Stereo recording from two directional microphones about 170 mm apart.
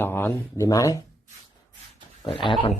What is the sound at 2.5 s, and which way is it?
Speech, 30° left (ahead or behind).